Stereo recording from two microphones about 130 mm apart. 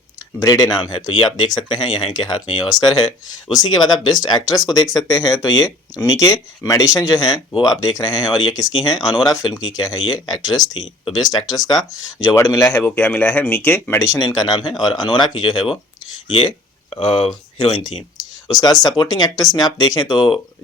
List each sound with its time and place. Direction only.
0.3 s speech: 30° left (ahead or behind)
0.9 s speech: 40° left (ahead or behind); by 12.8 s 25° left (ahead or behind)
12.8 s speech: 10° left (ahead or behind); by 15.7 s 35° left (ahead or behind)
16.9 s speech: 45° left (ahead or behind)